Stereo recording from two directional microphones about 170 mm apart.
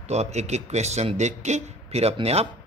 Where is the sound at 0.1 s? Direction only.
40° right (ahead or behind).